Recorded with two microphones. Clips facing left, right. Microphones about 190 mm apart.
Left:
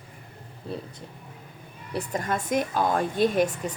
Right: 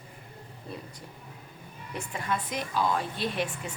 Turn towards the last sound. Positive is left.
turn(degrees=40)  # may be behind; listen again after turning